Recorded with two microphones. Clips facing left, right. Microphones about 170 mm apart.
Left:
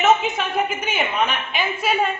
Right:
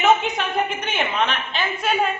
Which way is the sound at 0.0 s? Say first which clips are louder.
Even; centre (ahead or behind).